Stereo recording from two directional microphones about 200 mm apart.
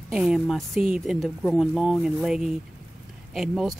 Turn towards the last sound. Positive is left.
turn(degrees=0)  # may be behind; listen again after turning